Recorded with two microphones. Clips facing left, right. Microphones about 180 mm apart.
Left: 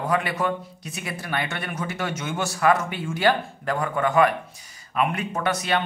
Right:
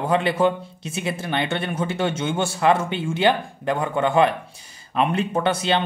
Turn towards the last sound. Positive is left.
turn(degrees=-30)  # may be behind; listen again after turning